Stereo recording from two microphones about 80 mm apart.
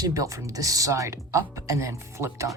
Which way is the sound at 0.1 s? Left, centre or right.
Right.